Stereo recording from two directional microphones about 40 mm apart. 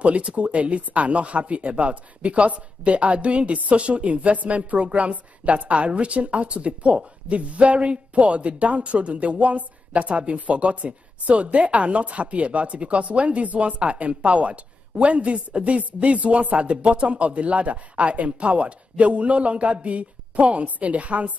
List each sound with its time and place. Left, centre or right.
0.0 s speech: right